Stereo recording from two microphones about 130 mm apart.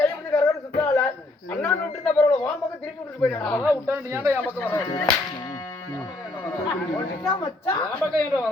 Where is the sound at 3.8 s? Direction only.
15° right (ahead or behind).